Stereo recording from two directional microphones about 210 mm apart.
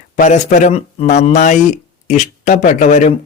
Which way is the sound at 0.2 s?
35° left (ahead or behind).